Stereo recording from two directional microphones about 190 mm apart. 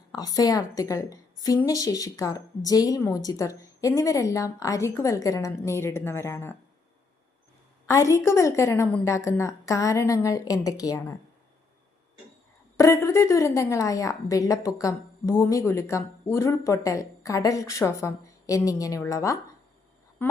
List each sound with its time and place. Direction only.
0.1 s a woman's voice: 20° left (ahead or behind)
7.9 s a woman's voice: 15° left (ahead or behind)
12.7 s a woman's voice: 15° left (ahead or behind)